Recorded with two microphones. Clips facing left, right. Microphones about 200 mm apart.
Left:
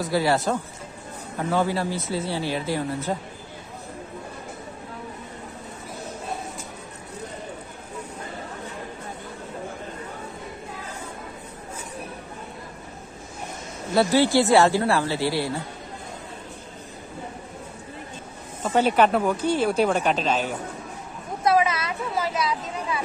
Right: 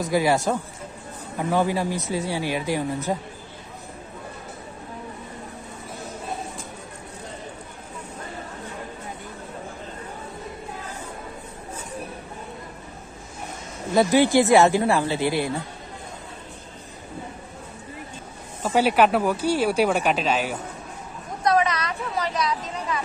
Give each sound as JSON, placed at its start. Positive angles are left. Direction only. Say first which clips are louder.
{"t": 0.0, "sound": "speech", "louder": "right 1 dB", "side_deg": -15}
{"t": 1.5, "sound": "speech", "louder": "right 1 dB", "side_deg": -15}
{"t": 13.9, "sound": "speech", "louder": "right 1 dB", "side_deg": -15}
{"t": 18.6, "sound": "speech", "louder": "right 1 dB", "side_deg": -10}
{"t": 21.5, "sound": "a sound", "louder": "even", "side_deg": 5}